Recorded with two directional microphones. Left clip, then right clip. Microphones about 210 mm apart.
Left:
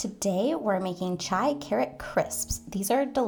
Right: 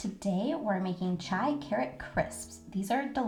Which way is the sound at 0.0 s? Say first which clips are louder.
Left 7 dB; 40° left (ahead or behind).